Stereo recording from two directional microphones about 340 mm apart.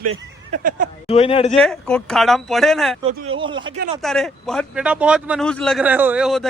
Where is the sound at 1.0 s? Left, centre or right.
Centre.